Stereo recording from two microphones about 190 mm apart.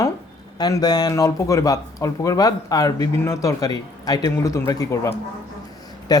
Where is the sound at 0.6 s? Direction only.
20° left (ahead or behind).